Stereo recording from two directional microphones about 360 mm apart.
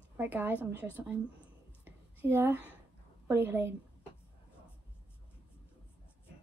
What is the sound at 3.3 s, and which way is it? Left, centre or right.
Speech, centre.